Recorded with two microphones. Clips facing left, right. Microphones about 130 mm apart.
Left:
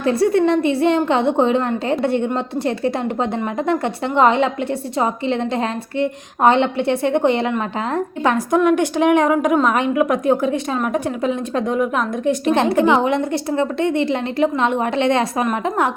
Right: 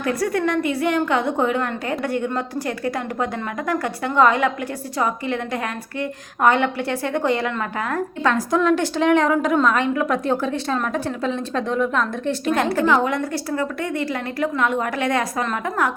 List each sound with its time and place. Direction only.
0.0 s a woman's voice: 25° left (ahead or behind)
12.5 s a woman's voice: 25° left (ahead or behind)